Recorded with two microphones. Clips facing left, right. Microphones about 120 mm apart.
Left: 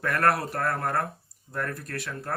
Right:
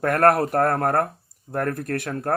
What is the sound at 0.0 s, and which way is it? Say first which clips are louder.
Speech: right 7 dB; 50° right (ahead or behind).